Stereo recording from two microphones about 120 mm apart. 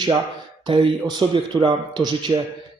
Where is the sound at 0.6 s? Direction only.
40° right (ahead or behind).